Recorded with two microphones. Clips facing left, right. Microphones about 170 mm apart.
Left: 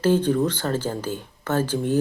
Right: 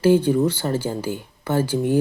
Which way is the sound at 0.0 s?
10° right (ahead or behind).